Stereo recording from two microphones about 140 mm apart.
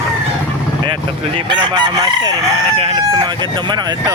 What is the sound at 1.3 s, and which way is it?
Chicken, 35° right (ahead or behind).